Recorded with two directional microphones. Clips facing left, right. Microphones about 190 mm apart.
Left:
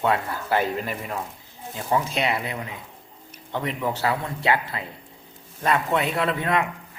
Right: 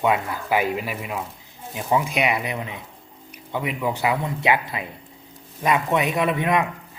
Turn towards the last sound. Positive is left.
turn(degrees=-20)  # may be behind; listen again after turning